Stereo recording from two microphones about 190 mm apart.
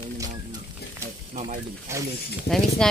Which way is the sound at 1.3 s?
40° right (ahead or behind).